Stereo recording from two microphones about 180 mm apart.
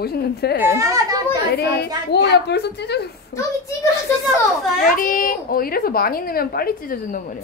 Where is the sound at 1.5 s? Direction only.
60° left (ahead or behind).